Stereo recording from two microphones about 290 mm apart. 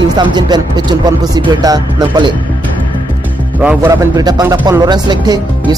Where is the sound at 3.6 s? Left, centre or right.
Centre.